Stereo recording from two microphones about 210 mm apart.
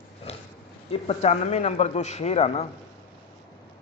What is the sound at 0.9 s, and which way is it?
Speech, 30° left (ahead or behind).